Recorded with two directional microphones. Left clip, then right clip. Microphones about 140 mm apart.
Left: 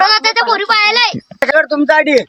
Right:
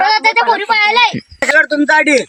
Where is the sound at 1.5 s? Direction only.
60° left (ahead or behind).